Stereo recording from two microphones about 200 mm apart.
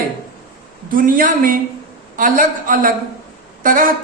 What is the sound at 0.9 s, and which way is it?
A man's voice, 45° right (ahead or behind).